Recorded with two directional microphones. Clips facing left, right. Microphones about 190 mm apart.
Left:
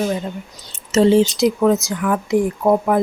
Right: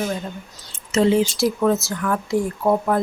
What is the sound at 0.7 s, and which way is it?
Speech, 35° left (ahead or behind).